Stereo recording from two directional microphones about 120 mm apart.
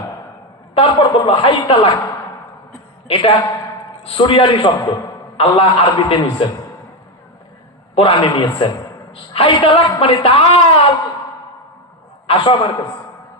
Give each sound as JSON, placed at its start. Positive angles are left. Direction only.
{"t": 0.7, "sound": "a woman's voice", "side_deg": 50}
{"t": 3.1, "sound": "a woman's voice", "side_deg": 45}
{"t": 7.9, "sound": "a man's voice", "side_deg": 40}
{"t": 9.1, "sound": "a woman's voice", "side_deg": 50}
{"t": 12.3, "sound": "a woman's voice", "side_deg": 40}